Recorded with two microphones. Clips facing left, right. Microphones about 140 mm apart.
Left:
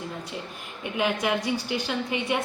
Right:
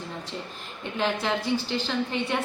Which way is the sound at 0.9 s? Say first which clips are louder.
Left 1 dB; 10° left (ahead or behind).